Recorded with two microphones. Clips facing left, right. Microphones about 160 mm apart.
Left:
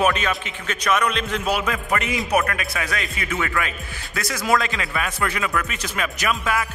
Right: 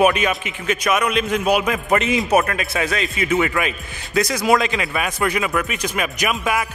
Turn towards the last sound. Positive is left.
turn(degrees=-15)  # may be behind; listen again after turning